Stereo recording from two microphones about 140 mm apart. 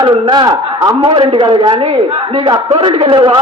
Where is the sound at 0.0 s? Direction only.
35° right (ahead or behind).